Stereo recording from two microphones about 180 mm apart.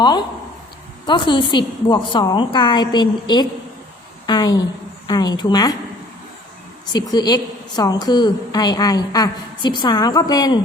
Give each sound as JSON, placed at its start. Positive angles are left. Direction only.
{"t": 1.0, "sound": "a woman's voice", "side_deg": 25}
{"t": 6.9, "sound": "a woman's voice", "side_deg": 25}